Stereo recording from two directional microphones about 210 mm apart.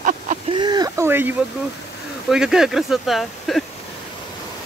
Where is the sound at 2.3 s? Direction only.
Centre (ahead or behind).